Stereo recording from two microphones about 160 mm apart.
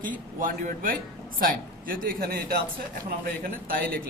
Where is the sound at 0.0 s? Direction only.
60° right (ahead or behind).